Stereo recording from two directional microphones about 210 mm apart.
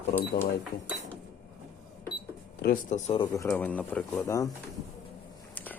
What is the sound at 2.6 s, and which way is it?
Speech, 40° left (ahead or behind).